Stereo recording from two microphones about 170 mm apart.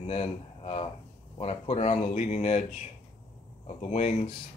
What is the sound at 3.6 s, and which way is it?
Speech, 40° left (ahead or behind).